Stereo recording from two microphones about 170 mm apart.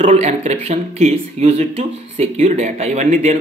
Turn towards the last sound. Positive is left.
turn(degrees=-40)  # may be behind; listen again after turning